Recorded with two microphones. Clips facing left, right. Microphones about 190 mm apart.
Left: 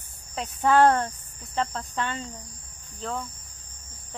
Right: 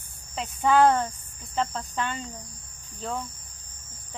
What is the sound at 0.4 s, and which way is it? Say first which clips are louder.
Speech: left 1 dB; centre (ahead or behind).